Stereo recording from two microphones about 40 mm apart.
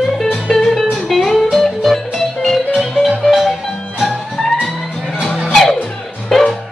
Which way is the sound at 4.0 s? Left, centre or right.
Centre.